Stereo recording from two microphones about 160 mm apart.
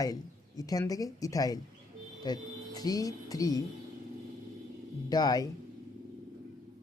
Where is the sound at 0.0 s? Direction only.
20° left (ahead or behind).